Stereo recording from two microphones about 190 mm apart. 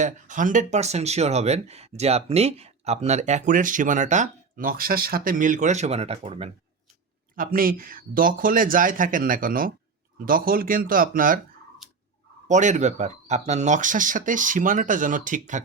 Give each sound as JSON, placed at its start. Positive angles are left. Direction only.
{"t": 0.0, "sound": "speech", "side_deg": -40}
{"t": 7.3, "sound": "speech", "side_deg": -50}
{"t": 12.5, "sound": "speech", "side_deg": -40}